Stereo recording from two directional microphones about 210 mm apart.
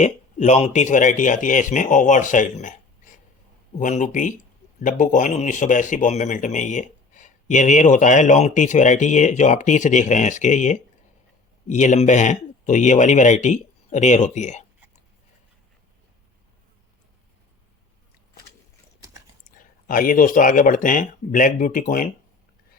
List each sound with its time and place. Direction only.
0.0 s speech: 35° left (ahead or behind)
19.5 s speech: 40° left (ahead or behind)